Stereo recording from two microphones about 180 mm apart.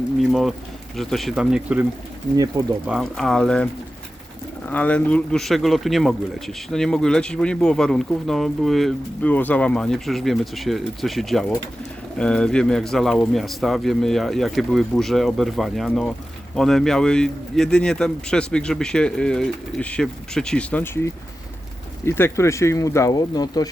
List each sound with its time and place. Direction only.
0.2 s speech: centre (ahead or behind)
2.3 s speech: 20° right (ahead or behind)
2.8 s speech: centre (ahead or behind)
4.7 s speech: 10° left (ahead or behind)